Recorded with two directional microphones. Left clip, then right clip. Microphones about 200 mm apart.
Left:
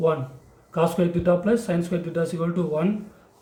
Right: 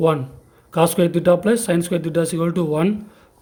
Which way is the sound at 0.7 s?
50° right (ahead or behind).